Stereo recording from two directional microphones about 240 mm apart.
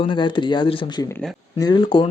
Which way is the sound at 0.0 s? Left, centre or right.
Centre.